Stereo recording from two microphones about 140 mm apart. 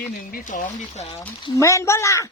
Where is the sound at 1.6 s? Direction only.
20° left (ahead or behind).